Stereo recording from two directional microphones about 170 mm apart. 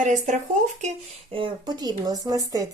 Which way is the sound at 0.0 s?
45° right (ahead or behind).